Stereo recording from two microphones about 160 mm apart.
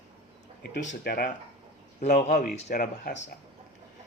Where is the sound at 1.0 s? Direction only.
70° left (ahead or behind).